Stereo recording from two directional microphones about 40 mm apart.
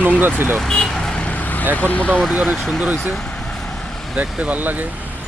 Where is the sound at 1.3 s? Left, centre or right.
Left.